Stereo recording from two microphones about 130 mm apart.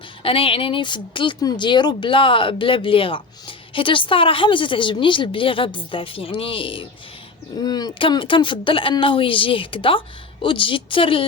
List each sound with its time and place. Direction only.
0.2 s a woman's voice: 45° left (ahead or behind)
7.6 s speech: 30° left (ahead or behind)